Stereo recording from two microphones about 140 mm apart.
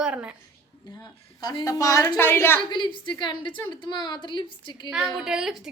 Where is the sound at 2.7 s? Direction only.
35° left (ahead or behind).